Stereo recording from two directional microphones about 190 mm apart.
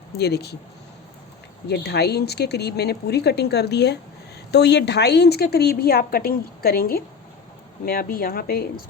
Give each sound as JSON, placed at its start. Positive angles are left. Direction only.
{"t": 0.2, "sound": "a woman's voice", "side_deg": 60}
{"t": 1.6, "sound": "a woman's voice", "side_deg": 60}